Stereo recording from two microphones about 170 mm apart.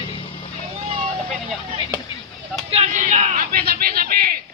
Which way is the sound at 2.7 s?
40° right (ahead or behind).